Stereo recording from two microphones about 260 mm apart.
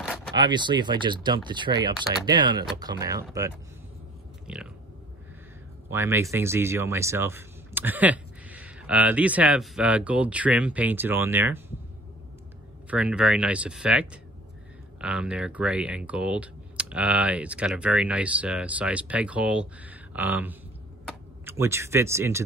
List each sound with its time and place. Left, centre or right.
0.3 s speech: centre
4.5 s speech: centre
5.9 s speech: centre
12.9 s speech: centre